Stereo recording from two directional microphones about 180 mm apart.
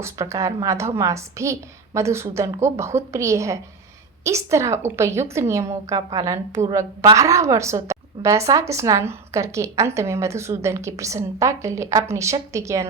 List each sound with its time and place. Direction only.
0.0 s a woman's voice: 15° right (ahead or behind)